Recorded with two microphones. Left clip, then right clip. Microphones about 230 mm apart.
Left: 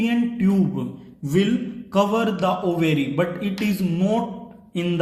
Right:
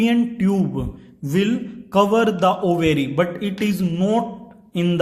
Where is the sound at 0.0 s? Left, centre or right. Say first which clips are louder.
Right 3 dB; right.